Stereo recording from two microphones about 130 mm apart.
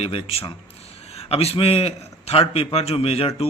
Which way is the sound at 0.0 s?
50° left (ahead or behind).